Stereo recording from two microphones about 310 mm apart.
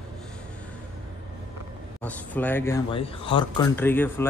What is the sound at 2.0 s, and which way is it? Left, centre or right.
Speech, centre.